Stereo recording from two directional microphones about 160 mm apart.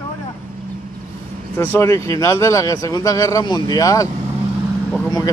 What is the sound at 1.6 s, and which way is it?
Speech, 15° left (ahead or behind).